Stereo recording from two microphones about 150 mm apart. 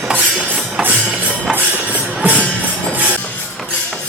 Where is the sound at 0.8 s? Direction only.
10° right (ahead or behind).